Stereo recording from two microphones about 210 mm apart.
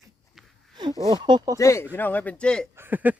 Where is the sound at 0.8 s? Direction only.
20° right (ahead or behind).